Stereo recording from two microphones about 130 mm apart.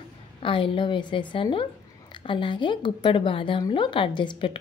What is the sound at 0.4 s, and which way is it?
Speech, 40° left (ahead or behind).